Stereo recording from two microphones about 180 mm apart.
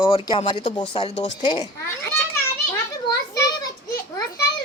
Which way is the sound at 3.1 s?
20° left (ahead or behind).